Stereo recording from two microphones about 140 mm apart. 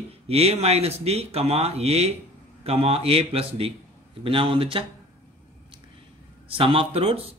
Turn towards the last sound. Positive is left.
turn(degrees=-40)  # may be behind; listen again after turning